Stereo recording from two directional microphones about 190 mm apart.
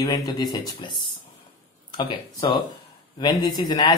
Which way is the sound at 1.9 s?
25° left (ahead or behind).